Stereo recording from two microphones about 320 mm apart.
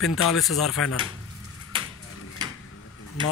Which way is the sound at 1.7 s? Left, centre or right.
Centre.